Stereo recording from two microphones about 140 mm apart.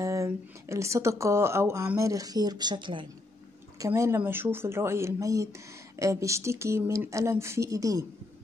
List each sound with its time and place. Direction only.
0.0 s speech: 20° right (ahead or behind)
3.8 s speech: 20° right (ahead or behind)